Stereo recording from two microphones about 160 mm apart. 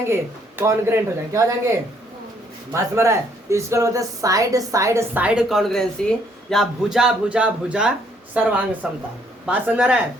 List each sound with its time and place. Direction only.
0.0 s speech: 15° right (ahead or behind)
2.7 s speech: 15° right (ahead or behind)